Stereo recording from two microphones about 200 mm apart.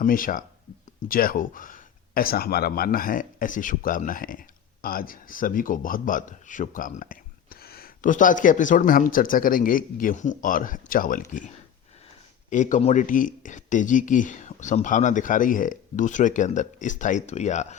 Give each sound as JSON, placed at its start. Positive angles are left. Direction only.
{"t": 0.0, "sound": "speech", "side_deg": 45}